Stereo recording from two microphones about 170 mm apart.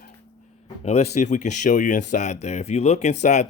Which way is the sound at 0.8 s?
40° left (ahead or behind).